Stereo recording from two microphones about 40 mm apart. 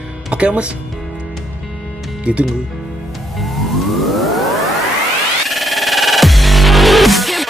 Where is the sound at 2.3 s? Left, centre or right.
Right.